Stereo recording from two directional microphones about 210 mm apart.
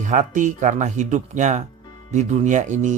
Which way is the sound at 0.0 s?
35° right (ahead or behind).